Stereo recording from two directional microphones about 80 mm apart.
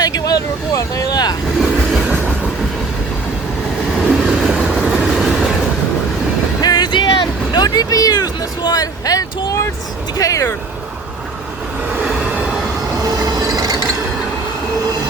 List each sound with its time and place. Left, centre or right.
0.0 s vehicle: left
1.6 s train: centre
4.0 s train: centre
6.6 s a sound: left
7.6 s a sound: left
10.2 s speech: left
12.0 s train: centre
13.1 s train: right